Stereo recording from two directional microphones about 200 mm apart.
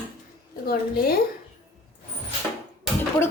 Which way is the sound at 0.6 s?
50° left (ahead or behind).